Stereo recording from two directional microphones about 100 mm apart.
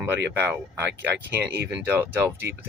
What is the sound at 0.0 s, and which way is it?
Speech, 25° right (ahead or behind).